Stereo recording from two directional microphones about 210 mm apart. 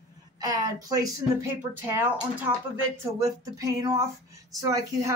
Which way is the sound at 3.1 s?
15° right (ahead or behind).